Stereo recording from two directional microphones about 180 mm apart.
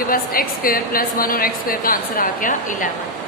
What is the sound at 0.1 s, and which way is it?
A woman's voice, 50° left (ahead or behind).